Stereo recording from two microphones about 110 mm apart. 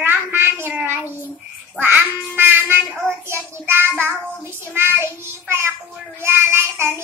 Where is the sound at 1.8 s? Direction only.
20° right (ahead or behind).